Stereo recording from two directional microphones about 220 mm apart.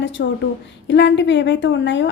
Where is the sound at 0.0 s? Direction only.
55° left (ahead or behind).